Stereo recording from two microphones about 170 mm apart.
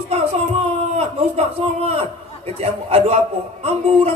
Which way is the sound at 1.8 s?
35° right (ahead or behind).